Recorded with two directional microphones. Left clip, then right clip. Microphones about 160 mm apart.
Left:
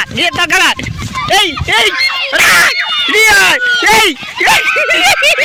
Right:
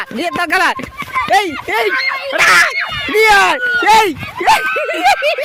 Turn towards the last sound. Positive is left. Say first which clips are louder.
# left 4 dB
turn(degrees=0)  # may be behind; listen again after turning